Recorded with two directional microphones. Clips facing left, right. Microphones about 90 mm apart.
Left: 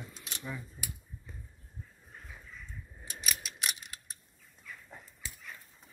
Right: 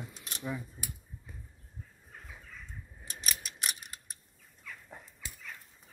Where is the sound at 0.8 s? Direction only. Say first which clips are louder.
Even; 20° right (ahead or behind).